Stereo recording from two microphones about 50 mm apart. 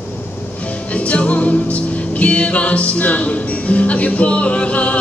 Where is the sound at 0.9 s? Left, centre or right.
Left.